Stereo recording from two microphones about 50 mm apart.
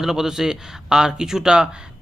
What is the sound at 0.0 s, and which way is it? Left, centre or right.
Speech, centre.